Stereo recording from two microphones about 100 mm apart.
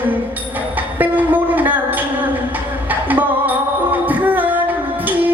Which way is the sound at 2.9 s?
20° right (ahead or behind).